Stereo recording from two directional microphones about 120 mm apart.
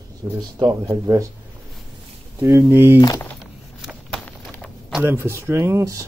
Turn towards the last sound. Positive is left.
turn(degrees=-25)  # may be behind; listen again after turning